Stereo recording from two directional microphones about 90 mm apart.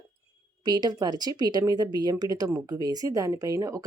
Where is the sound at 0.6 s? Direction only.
50° right (ahead or behind).